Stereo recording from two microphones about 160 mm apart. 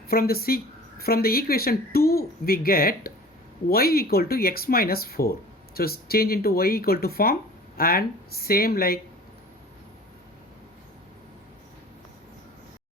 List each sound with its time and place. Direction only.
0.1 s speech: 70° left (ahead or behind)